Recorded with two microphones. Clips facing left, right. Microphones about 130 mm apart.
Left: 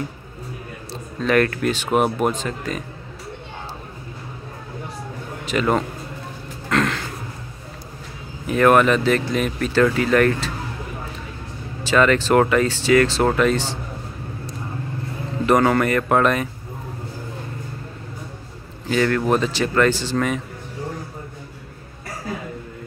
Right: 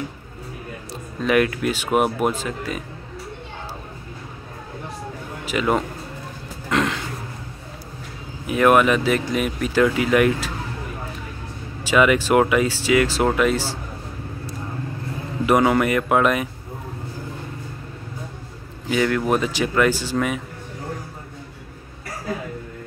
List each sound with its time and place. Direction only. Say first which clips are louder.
1.2 s speech: left 1 dB; 10° right (ahead or behind)
5.4 s a man's voice: left 1 dB; 10° right (ahead or behind)
6.7 s a sound: left 1 dB; 15° right (ahead or behind)
8.5 s speech: left 1 dB; 10° right (ahead or behind)
11.8 s speech: even; 10° right (ahead or behind)
15.4 s speech: even; 10° right (ahead or behind)
18.9 s speech: left 1 dB; 10° right (ahead or behind)